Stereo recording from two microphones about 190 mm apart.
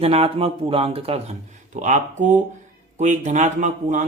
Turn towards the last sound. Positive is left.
turn(degrees=-40)  # may be behind; listen again after turning